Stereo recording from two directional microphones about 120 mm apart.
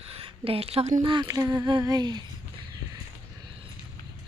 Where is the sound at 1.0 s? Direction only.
40° right (ahead or behind).